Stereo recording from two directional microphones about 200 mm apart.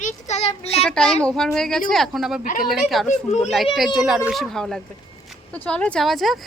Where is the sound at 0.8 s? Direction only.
5° left (ahead or behind).